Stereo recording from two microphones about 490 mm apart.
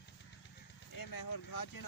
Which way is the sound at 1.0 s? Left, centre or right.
Left.